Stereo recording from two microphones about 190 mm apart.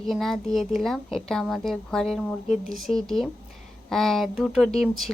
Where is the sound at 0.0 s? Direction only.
Centre (ahead or behind).